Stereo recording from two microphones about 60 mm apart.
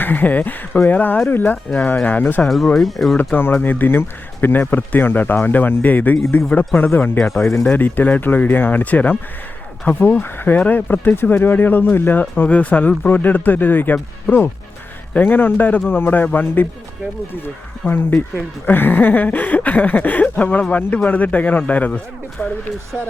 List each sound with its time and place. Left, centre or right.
0.0 s speech: left
2.7 s speech: centre
3.3 s speech: left